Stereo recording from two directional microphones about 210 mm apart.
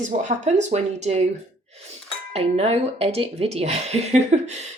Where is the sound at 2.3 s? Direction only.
30° right (ahead or behind).